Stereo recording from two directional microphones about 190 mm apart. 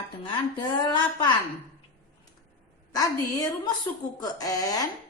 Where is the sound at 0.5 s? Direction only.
20° left (ahead or behind).